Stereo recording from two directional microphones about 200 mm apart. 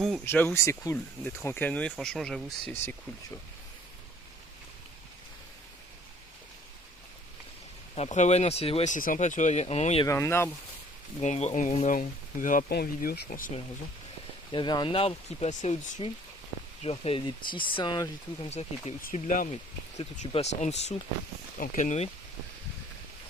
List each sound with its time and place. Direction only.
0.0 s speech: 5° left (ahead or behind)
7.9 s speech: 35° left (ahead or behind)
10.1 s speech: 10° left (ahead or behind)
11.2 s speech: 35° left (ahead or behind)
14.5 s speech: 20° left (ahead or behind)
18.5 s speech: 35° left (ahead or behind)